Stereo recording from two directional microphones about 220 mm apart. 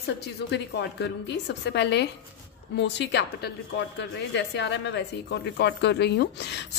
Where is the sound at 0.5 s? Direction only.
50° left (ahead or behind).